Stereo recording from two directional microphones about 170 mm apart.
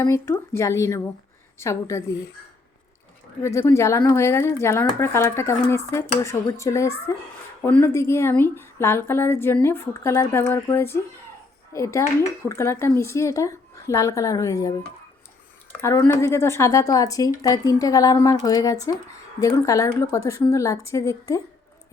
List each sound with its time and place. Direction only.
0.0 s a woman's voice: 15° left (ahead or behind)
3.4 s a woman's voice: 15° left (ahead or behind)
15.8 s speech: 15° left (ahead or behind)